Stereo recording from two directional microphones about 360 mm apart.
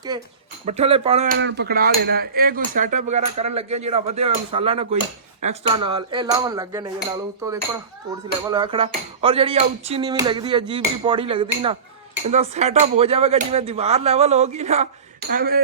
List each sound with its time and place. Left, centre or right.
0.1 s speech: centre
0.6 s hammer: centre
3.8 s speech: centre
15.3 s hammer: right